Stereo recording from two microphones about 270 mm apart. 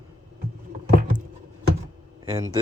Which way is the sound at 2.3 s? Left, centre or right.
Centre.